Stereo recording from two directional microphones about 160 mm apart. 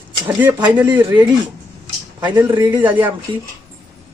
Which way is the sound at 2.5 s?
30° right (ahead or behind).